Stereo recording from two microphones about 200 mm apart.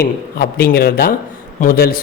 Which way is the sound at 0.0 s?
50° left (ahead or behind).